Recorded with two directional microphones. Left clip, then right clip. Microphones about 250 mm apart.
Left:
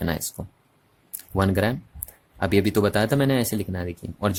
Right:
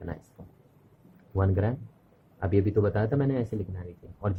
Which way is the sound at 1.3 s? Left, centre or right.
Left.